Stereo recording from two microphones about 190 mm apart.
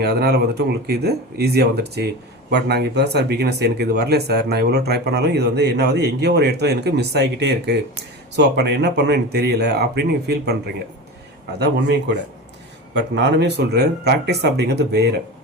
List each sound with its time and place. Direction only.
0.0 s speech: 55° right (ahead or behind)